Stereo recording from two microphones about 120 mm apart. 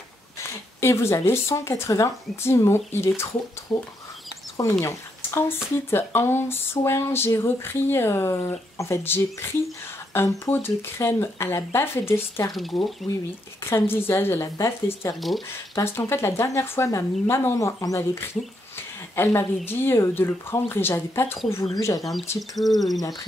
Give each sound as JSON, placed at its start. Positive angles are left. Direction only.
{"t": 0.4, "sound": "speech", "side_deg": 20}
{"t": 12.5, "sound": "speech", "side_deg": 0}
{"t": 13.7, "sound": "speech", "side_deg": 20}
{"t": 15.1, "sound": "speech", "side_deg": 0}
{"t": 15.7, "sound": "speech", "side_deg": 20}
{"t": 22.6, "sound": "speech", "side_deg": 0}